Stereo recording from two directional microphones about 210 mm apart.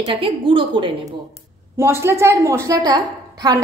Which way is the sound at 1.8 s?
10° right (ahead or behind).